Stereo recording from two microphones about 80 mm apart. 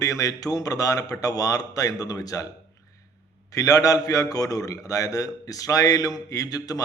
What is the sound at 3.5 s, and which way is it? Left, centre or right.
A man's voice, left.